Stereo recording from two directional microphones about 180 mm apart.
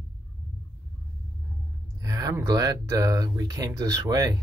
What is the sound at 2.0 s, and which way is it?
Speech, 20° right (ahead or behind).